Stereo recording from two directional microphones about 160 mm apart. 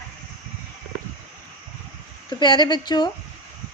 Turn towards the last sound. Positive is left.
turn(degrees=25)  # may be behind; listen again after turning